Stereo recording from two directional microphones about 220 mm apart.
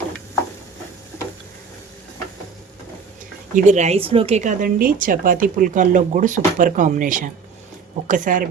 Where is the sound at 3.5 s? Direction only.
35° right (ahead or behind).